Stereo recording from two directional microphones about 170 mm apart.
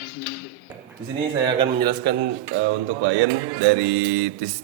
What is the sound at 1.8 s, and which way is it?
Speech, 65° right (ahead or behind).